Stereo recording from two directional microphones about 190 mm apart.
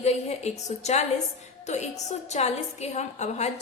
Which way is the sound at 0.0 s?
35° left (ahead or behind).